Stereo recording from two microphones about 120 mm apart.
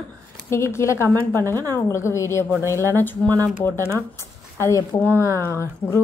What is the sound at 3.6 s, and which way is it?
A woman's voice, 20° left (ahead or behind).